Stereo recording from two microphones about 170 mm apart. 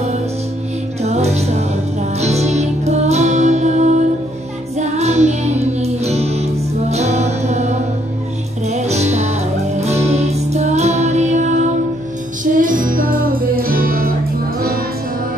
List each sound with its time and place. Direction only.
1.0 s music: 40° right (ahead or behind); by 14.1 s 60° right (ahead or behind)